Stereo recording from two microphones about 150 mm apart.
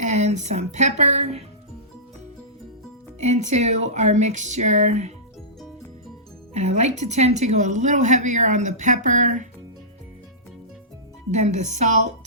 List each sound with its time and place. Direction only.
0.0 s speech: 50° right (ahead or behind)
3.2 s speech: 50° right (ahead or behind)
6.5 s speech: 50° right (ahead or behind)
11.3 s speech: 50° right (ahead or behind)